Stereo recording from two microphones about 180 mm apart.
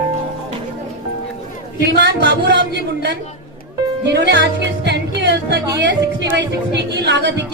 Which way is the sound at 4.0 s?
70° right (ahead or behind).